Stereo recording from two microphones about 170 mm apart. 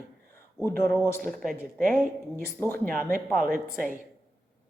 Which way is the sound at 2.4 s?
10° left (ahead or behind).